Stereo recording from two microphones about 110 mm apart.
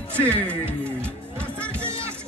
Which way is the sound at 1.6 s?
10° left (ahead or behind).